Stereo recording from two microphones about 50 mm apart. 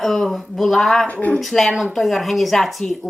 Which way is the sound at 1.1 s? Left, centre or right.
Left.